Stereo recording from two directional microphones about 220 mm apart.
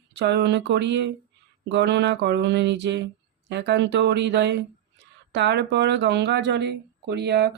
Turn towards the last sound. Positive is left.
turn(degrees=-50)  # may be behind; listen again after turning